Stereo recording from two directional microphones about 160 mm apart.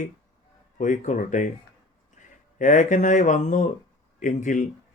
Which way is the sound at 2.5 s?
50° left (ahead or behind).